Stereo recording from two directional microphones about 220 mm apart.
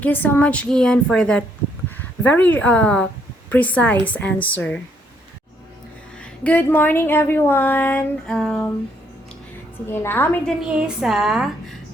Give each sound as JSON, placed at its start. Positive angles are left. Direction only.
{"t": 0.0, "sound": "a woman's voice", "side_deg": 10}
{"t": 6.1, "sound": "speech", "side_deg": 5}
{"t": 9.8, "sound": "speech", "side_deg": 10}
{"t": 10.7, "sound": "a woman's voice", "side_deg": -5}